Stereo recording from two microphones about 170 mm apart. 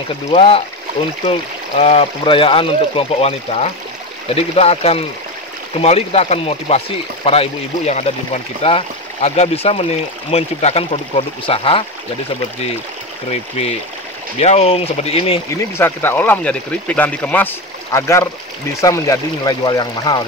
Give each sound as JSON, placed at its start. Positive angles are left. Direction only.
{"t": 0.1, "sound": "speech", "side_deg": 35}
{"t": 1.8, "sound": "speech", "side_deg": 35}
{"t": 13.3, "sound": "speech", "side_deg": 40}
{"t": 15.8, "sound": "speech", "side_deg": 10}